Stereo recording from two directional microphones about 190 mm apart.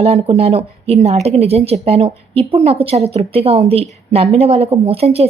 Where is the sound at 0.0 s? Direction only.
30° right (ahead or behind).